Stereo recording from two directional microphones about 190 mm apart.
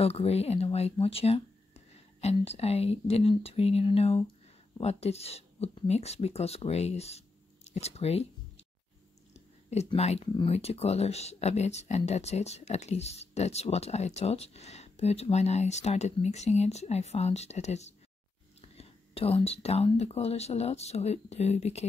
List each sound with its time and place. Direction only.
0.0 s speech: 30° left (ahead or behind)
9.3 s speech: 35° left (ahead or behind)